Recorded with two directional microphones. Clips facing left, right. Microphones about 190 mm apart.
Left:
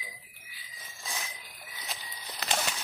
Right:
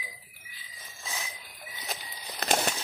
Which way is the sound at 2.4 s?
45° right (ahead or behind).